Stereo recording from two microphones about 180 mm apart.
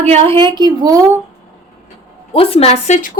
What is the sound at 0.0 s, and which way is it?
A woman's voice, 30° right (ahead or behind).